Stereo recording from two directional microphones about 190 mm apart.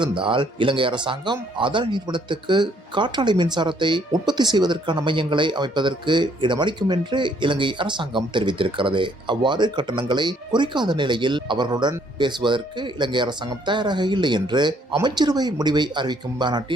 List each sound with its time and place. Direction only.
0.0 s speech: 25° right (ahead or behind)